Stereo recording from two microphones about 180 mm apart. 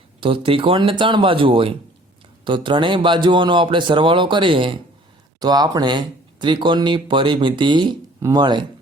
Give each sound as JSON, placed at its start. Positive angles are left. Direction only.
{"t": 0.2, "sound": "speech", "side_deg": -30}